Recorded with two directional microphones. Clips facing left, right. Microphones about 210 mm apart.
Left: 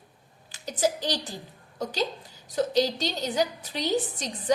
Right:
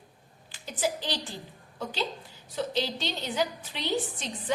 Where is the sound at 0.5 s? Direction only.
40° left (ahead or behind).